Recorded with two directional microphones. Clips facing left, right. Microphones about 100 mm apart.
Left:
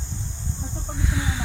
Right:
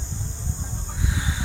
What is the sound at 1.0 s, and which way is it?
Snake, 20° right (ahead or behind).